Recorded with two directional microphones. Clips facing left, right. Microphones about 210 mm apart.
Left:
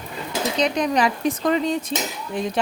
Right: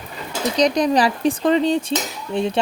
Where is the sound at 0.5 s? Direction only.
35° right (ahead or behind).